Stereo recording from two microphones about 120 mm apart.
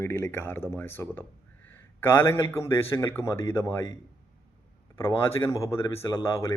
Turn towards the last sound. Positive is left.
turn(degrees=20)  # may be behind; listen again after turning